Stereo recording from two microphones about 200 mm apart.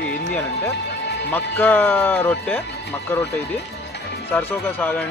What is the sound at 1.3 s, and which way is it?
Speech, 10° left (ahead or behind).